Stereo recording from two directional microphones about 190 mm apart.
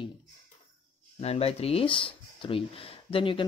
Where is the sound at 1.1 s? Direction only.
35° left (ahead or behind).